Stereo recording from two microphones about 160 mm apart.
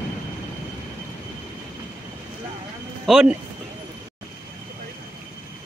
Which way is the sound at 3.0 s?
5° right (ahead or behind).